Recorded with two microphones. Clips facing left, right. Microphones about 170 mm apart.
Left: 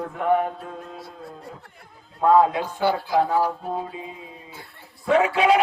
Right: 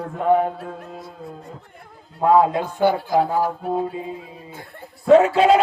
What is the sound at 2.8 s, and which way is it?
Speech, 50° right (ahead or behind).